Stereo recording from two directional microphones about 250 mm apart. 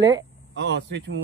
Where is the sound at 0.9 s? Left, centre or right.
Right.